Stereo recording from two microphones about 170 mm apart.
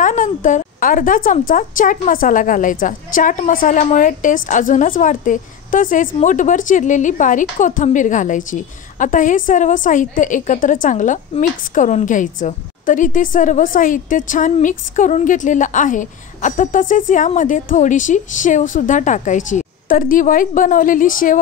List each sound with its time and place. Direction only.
0.0 s a woman's voice: 50° left (ahead or behind)